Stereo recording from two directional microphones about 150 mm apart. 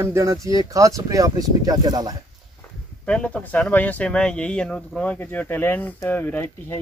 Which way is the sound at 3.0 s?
5° left (ahead or behind).